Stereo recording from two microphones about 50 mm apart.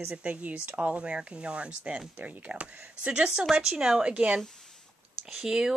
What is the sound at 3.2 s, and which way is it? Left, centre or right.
Speech, centre.